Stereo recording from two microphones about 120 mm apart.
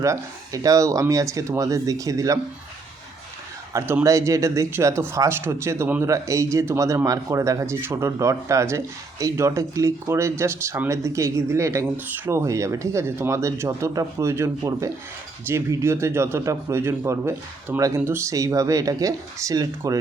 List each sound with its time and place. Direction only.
0.0 s speech: 25° right (ahead or behind)
3.7 s a man's voice: 25° right (ahead or behind)